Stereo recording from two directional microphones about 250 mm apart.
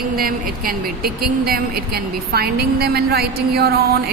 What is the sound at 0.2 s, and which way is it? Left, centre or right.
Speech, right.